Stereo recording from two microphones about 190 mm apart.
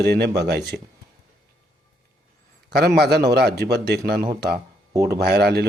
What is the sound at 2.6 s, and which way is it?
Speech, 55° right (ahead or behind).